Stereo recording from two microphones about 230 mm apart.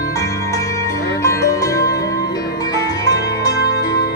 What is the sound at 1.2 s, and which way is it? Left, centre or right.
Music, centre.